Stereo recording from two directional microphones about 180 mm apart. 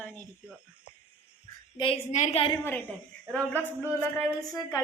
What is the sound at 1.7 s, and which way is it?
Speech, 30° left (ahead or behind).